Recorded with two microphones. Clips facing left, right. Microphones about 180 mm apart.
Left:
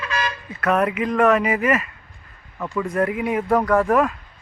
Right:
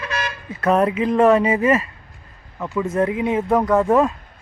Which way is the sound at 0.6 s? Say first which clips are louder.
Right 3 dB; 30° right (ahead or behind).